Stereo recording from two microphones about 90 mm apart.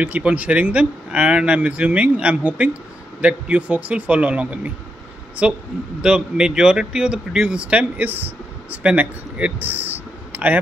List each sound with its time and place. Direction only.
0.0 s speech: 15° right (ahead or behind)
5.9 s speech: 10° right (ahead or behind)
10.3 s a sound: 15° right (ahead or behind)